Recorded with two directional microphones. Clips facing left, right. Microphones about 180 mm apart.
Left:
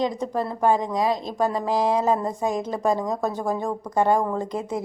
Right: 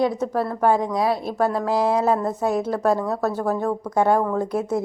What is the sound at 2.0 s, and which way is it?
Speech, 10° left (ahead or behind).